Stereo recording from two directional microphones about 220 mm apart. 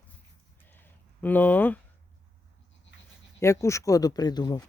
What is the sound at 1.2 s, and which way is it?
Speech, 5° left (ahead or behind).